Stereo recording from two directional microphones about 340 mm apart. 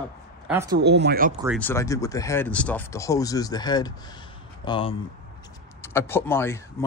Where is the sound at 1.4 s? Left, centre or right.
Centre.